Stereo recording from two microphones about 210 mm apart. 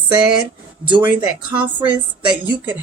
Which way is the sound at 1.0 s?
5° right (ahead or behind).